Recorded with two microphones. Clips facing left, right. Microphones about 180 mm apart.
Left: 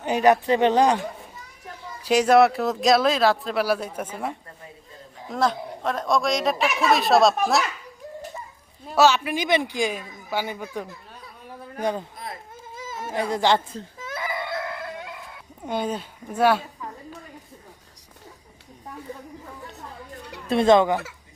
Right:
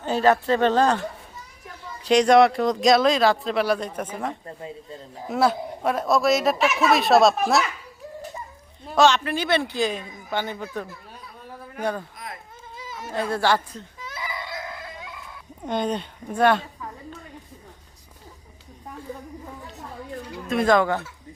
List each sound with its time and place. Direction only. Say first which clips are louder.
0.0 s speech: left 1 dB; 15° left (ahead or behind)
2.0 s speech: right 1 dB; 5° left (ahead or behind)
5.3 s speech: right 2 dB; 5° right (ahead or behind)
8.9 s speech: even; 5° left (ahead or behind)
12.7 s baby cry: left 3 dB; 45° left (ahead or behind)
13.1 s speech: left 1 dB; 15° left (ahead or behind)
14.0 s baby cry: left 4 dB; 50° left (ahead or behind)
15.6 s speech: right 2 dB; 10° left (ahead or behind)
20.5 s speech: left 3 dB; 25° left (ahead or behind)